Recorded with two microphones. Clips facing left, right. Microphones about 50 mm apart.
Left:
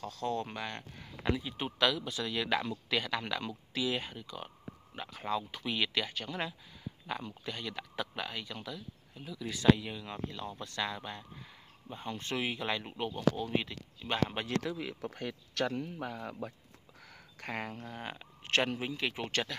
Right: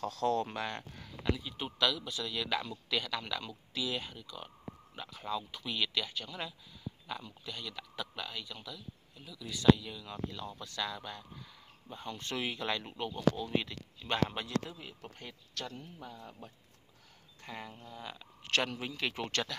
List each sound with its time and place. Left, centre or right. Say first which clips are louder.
0.0 s speech: right 4 dB; centre
1.2 s speech: left 2 dB; centre
10.3 s speech: left 2 dB; centre
14.7 s speech: left 9 dB; left
17.4 s speech: left 6 dB; left
18.1 s speech: left 1 dB; left
18.9 s speech: left 1 dB; centre